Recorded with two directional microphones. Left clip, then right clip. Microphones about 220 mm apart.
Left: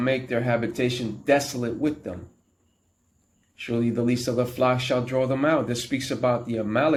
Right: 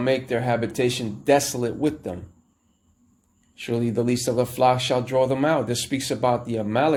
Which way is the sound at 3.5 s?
35° right (ahead or behind).